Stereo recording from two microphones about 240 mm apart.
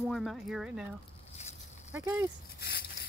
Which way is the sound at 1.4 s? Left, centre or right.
Left.